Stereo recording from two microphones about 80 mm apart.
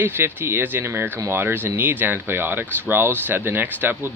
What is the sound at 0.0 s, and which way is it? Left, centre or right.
Speech, right.